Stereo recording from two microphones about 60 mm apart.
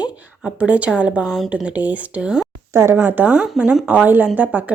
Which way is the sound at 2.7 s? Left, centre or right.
Right.